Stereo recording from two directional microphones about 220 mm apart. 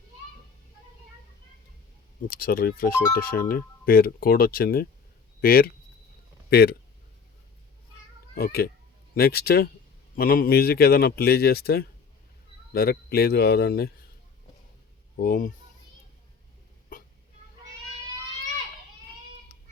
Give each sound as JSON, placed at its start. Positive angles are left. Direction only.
{"t": 2.3, "sound": "speech", "side_deg": 45}
{"t": 8.4, "sound": "speech", "side_deg": 45}
{"t": 15.1, "sound": "speech", "side_deg": 40}